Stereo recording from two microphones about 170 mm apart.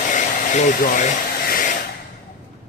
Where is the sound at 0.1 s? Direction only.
50° left (ahead or behind).